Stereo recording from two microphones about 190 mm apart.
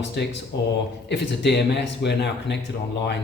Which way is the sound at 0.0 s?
60° left (ahead or behind).